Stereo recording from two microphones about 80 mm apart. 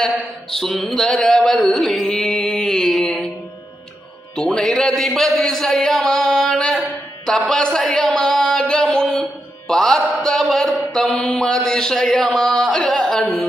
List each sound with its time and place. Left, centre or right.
0.5 s a man's voice: centre
2.0 s mantra: centre
4.4 s a man's voice: centre